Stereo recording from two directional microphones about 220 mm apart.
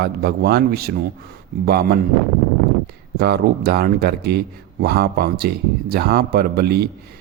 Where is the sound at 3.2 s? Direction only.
45° right (ahead or behind).